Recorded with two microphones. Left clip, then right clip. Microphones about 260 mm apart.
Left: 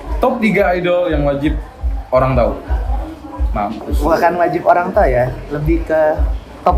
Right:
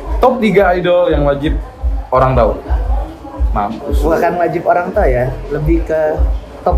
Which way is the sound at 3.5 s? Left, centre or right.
Centre.